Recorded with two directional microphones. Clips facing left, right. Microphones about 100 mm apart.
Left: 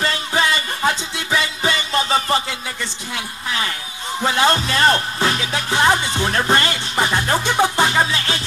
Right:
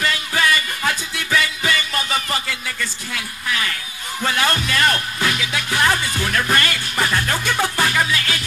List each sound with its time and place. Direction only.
0.0 s music: 30° left (ahead or behind)
3.4 s speech: 25° left (ahead or behind)
4.2 s music: 25° left (ahead or behind)